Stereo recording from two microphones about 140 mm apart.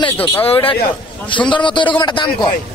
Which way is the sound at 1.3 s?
35° left (ahead or behind).